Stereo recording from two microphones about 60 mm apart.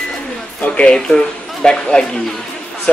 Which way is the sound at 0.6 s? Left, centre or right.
Left.